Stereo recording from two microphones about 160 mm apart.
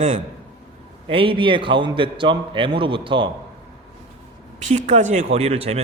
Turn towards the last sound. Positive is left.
turn(degrees=-40)  # may be behind; listen again after turning